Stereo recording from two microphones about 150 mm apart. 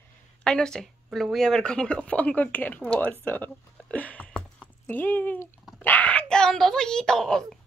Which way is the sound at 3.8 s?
10° left (ahead or behind).